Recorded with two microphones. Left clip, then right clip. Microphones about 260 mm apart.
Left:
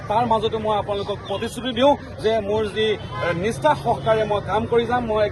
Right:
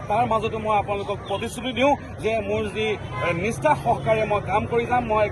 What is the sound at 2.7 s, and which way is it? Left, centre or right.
Speech, left.